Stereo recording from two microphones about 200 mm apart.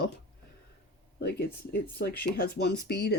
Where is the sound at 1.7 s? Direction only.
50° left (ahead or behind).